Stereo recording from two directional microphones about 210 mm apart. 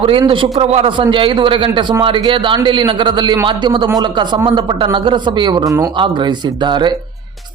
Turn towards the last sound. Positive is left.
turn(degrees=-20)  # may be behind; listen again after turning